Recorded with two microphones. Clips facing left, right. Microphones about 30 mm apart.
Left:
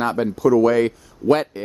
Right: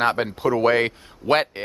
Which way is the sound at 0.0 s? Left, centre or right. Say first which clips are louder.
Left 2 dB; right.